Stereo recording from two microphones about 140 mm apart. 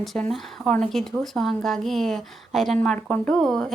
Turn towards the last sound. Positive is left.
turn(degrees=0)  # may be behind; listen again after turning